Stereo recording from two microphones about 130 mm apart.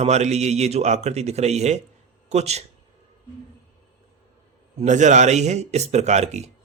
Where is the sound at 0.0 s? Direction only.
60° right (ahead or behind).